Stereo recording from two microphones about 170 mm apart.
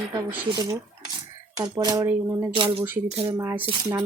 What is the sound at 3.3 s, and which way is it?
Speech, 15° right (ahead or behind).